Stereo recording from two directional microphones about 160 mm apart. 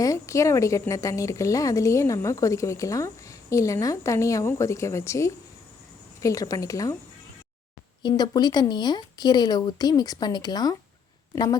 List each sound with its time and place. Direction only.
0.0 s a woman's voice: 20° left (ahead or behind)
8.0 s a woman's voice: 25° left (ahead or behind)